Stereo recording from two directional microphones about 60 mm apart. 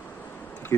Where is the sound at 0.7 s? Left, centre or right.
Left.